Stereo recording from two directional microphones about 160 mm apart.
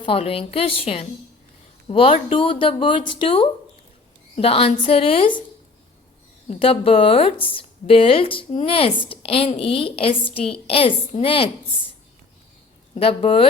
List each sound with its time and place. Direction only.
0.0 s a woman's voice: 35° left (ahead or behind)
6.5 s a woman's voice: 35° left (ahead or behind)
12.9 s a woman's voice: 35° left (ahead or behind)